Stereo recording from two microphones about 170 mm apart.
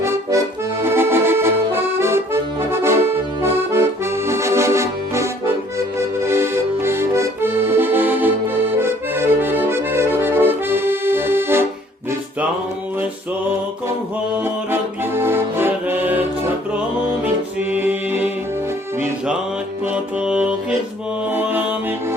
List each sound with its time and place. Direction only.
0.0 s accordion: 15° right (ahead or behind)
4.3 s music: 15° right (ahead or behind)
6.2 s accordion: 15° right (ahead or behind)
14.3 s music: 15° right (ahead or behind)
17.7 s music: 10° right (ahead or behind)
19.9 s music: 5° right (ahead or behind)